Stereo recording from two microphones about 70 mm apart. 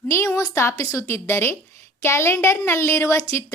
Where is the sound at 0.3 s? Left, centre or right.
Left.